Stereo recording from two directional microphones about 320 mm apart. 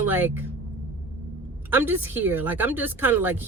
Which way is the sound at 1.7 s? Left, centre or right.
Centre.